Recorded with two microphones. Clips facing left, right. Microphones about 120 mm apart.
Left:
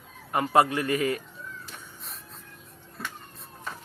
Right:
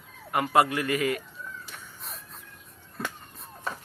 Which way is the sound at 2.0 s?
Centre (ahead or behind).